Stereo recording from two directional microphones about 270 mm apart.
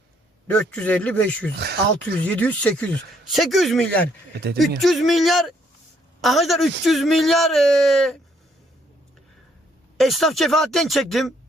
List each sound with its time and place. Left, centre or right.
0.5 s speech: centre
1.5 s speech: right
2.2 s speech: centre
10.0 s speech: centre